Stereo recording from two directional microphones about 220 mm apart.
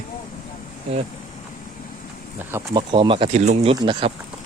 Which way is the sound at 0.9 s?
30° right (ahead or behind).